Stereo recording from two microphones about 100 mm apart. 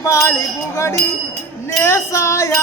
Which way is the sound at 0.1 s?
30° left (ahead or behind).